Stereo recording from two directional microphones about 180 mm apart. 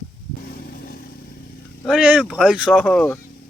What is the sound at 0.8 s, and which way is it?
Vehicle, 55° left (ahead or behind).